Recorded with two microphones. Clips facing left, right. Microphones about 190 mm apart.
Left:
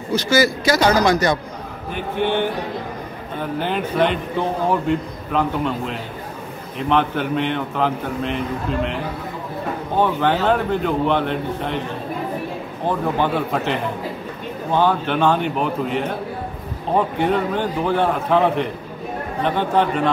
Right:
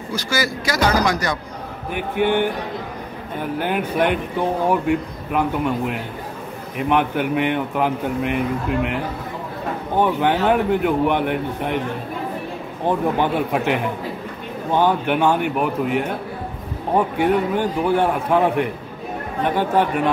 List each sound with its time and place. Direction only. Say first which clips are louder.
0.1 s speech: left 6 dB; 25° left (ahead or behind)
1.9 s a man's voice: right 2 dB; 15° right (ahead or behind)
12.8 s a man's voice: right 1 dB; 15° right (ahead or behind)